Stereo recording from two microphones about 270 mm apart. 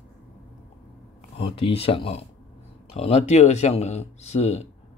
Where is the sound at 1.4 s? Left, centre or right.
Left.